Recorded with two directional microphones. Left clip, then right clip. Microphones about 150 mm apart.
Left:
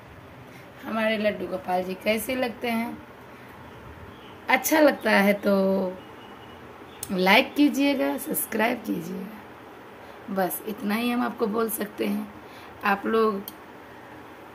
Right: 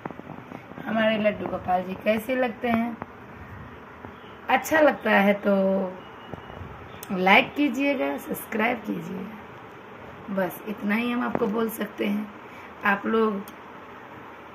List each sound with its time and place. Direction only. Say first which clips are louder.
0.9 s a woman's voice: right 2 dB; 10° left (ahead or behind)
4.5 s a woman's voice: even; 20° left (ahead or behind)
7.2 s a woman's voice: even; 15° left (ahead or behind)
10.3 s a woman's voice: left 1 dB; 5° left (ahead or behind)